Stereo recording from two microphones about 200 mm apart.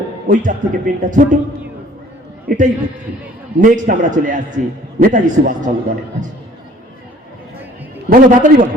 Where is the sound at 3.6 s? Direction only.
40° right (ahead or behind).